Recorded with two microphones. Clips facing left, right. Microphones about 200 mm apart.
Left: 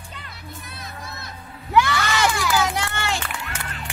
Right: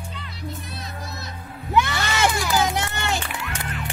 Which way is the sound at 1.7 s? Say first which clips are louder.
Left 2 dB; 25° right (ahead or behind).